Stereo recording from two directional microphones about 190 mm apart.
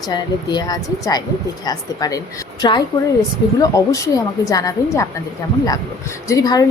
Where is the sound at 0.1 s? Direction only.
20° left (ahead or behind).